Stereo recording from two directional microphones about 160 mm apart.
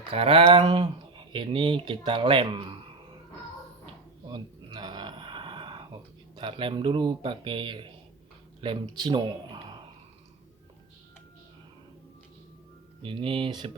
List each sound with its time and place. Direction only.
0.1 s speech: 35° right (ahead or behind)
4.3 s a sound: 25° right (ahead or behind)
8.6 s speech: 30° right (ahead or behind)
13.0 s speech: 35° right (ahead or behind)